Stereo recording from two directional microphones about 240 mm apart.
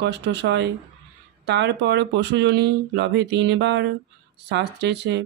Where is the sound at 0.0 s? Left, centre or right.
Right.